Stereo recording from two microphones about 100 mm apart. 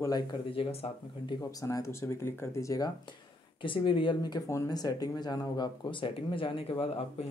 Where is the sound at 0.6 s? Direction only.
90° left.